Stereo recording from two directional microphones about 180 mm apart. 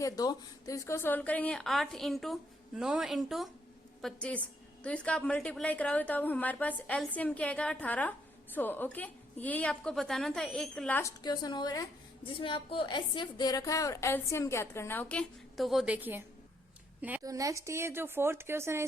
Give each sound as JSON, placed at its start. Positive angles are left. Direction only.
{"t": 0.0, "sound": "a woman's voice", "side_deg": 20}
{"t": 11.2, "sound": "a woman's voice", "side_deg": 25}
{"t": 17.2, "sound": "speech", "side_deg": -20}